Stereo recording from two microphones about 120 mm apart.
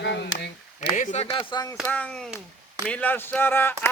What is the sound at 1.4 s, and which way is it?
Speech, 40° left (ahead or behind).